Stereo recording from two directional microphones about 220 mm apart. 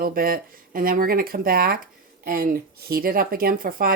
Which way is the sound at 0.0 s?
40° right (ahead or behind).